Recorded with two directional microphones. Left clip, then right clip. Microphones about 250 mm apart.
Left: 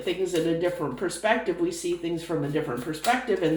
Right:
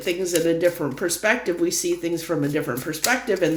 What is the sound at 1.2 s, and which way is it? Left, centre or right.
Speech, right.